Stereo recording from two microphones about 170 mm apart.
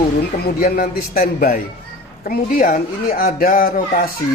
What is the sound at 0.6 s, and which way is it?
Speech, 55° left (ahead or behind).